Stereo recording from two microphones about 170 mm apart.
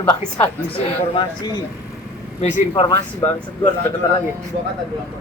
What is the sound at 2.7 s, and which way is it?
Speech, 20° left (ahead or behind).